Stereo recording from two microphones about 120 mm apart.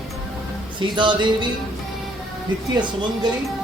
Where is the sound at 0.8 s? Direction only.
40° right (ahead or behind).